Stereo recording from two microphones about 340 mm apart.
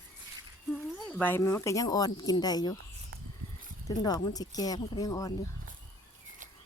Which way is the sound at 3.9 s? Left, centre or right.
Centre.